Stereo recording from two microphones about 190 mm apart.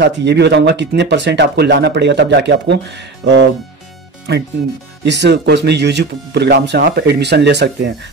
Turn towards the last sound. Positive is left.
turn(degrees=-65)  # may be behind; listen again after turning